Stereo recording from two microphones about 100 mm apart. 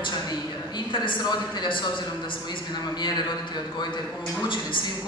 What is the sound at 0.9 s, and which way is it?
Speech, 55° left (ahead or behind).